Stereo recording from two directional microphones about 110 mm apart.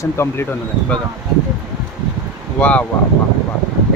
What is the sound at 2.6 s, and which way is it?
Speech, 10° left (ahead or behind).